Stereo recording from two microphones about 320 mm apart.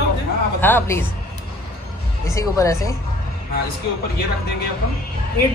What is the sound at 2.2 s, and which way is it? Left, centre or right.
Speech, centre.